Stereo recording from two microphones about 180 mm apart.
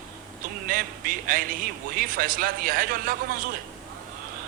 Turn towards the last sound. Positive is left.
turn(degrees=-50)  # may be behind; listen again after turning